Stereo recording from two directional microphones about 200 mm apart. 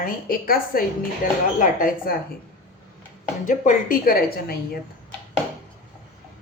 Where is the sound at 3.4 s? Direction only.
40° left (ahead or behind).